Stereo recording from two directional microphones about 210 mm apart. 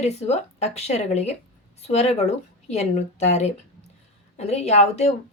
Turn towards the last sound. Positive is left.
turn(degrees=30)  # may be behind; listen again after turning